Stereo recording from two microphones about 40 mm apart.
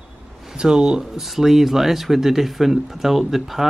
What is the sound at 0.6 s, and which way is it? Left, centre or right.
Speech, centre.